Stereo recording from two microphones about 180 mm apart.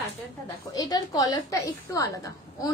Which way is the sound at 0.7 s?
20° left (ahead or behind).